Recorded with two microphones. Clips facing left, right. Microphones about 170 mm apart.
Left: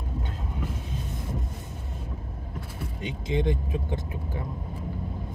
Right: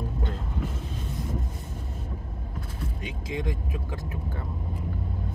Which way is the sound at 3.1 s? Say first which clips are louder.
Left 6 dB; 25° left (ahead or behind).